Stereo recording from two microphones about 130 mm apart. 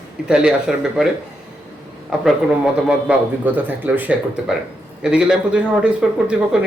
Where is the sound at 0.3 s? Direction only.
5° right (ahead or behind).